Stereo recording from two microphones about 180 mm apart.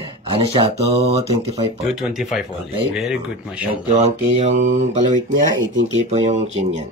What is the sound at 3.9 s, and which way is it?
Speech, 35° right (ahead or behind).